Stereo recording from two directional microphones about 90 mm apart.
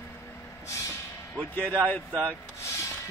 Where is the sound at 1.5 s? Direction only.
15° left (ahead or behind).